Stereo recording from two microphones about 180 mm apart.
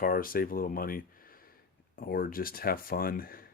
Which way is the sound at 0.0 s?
50° left (ahead or behind).